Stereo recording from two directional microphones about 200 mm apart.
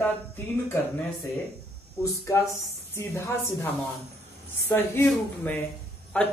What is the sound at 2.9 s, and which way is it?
Speech, 15° left (ahead or behind).